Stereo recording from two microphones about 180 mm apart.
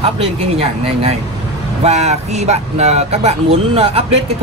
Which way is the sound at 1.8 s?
40° right (ahead or behind).